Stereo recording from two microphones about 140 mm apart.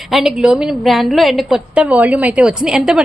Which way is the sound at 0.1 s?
Centre (ahead or behind).